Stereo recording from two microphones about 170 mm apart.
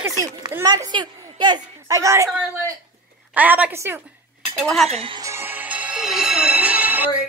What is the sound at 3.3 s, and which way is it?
Speech, 10° right (ahead or behind).